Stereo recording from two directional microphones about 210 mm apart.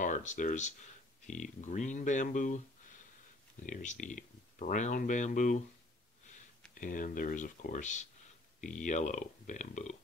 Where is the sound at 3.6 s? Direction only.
35° left (ahead or behind).